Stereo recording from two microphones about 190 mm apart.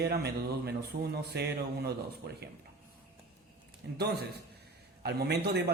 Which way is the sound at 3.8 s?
60° right (ahead or behind).